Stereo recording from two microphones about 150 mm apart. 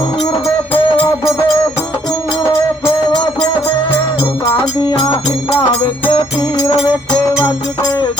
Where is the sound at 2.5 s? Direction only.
20° left (ahead or behind).